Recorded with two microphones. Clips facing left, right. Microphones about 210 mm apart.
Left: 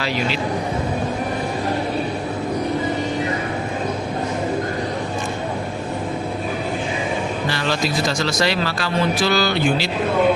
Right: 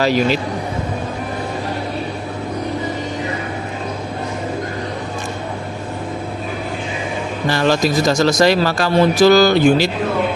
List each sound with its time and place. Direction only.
0.0 s speech: 40° right (ahead or behind)
7.5 s speech: 45° right (ahead or behind)